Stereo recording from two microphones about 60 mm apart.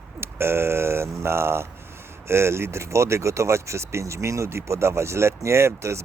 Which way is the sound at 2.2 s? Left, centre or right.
Right.